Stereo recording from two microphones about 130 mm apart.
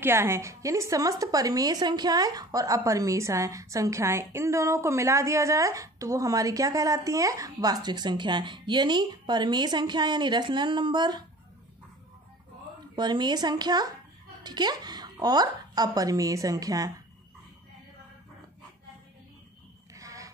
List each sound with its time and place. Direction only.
0.0 s a woman's voice: 20° right (ahead or behind); by 11.2 s 35° right (ahead or behind)
12.9 s a woman's voice: 35° right (ahead or behind)
19.9 s a sound: 25° right (ahead or behind)